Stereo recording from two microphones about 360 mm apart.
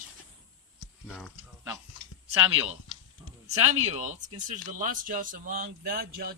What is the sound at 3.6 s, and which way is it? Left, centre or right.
Speech, right.